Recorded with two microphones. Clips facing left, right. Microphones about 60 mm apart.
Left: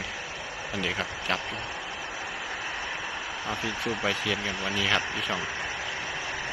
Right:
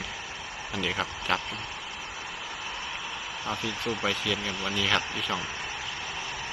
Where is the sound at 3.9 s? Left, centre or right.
Centre.